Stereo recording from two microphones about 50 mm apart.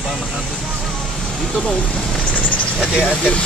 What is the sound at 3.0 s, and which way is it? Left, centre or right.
Speech, left.